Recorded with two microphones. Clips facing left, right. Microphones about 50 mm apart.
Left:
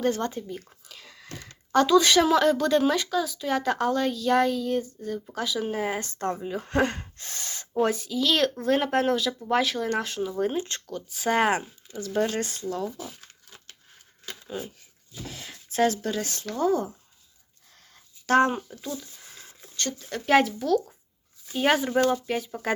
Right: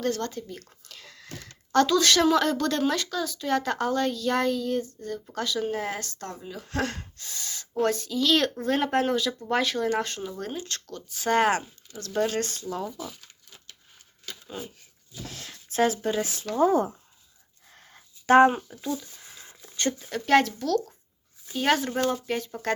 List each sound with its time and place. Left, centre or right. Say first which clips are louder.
0.0 s speech: left 2 dB; centre
0.5 s a sound: left 3 dB; centre
1.7 s a woman's voice: left 2 dB; centre
6.0 s speech: left 8 dB; left
7.2 s gasp: left 1 dB; left
7.7 s a woman's voice: left 1 dB; centre
10.4 s speech: left 7 dB; left; by 12.6 s centre
14.4 s speech: left 4 dB; centre
16.5 s speech: right 3 dB; centre
17.7 s a sound: right 3 dB; right
18.5 s speech: right 2 dB; centre
19.5 s a sound: right 4 dB; centre
20.1 s a woman's voice: left 1 dB; centre